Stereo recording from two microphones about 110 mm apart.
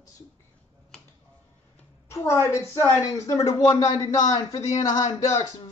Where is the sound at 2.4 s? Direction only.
25° left (ahead or behind).